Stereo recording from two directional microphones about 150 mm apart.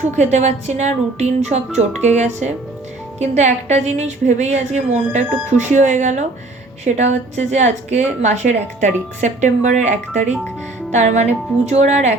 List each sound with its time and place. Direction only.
0.0 s a woman's voice: 50° right (ahead or behind)
10.9 s a woman's voice: 50° right (ahead or behind)